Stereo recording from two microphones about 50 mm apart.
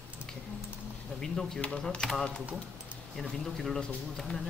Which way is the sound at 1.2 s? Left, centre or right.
Centre.